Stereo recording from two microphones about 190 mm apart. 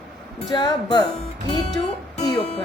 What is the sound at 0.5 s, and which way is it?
Speech, 25° left (ahead or behind).